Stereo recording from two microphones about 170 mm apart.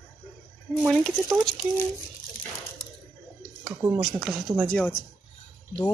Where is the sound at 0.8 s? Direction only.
Centre (ahead or behind).